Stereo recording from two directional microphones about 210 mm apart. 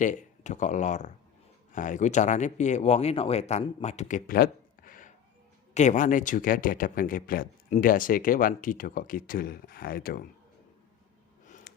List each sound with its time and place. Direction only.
0.0 s speech: 35° left (ahead or behind)